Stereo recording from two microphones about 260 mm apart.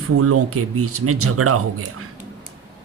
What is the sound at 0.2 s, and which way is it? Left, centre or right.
Speech, right.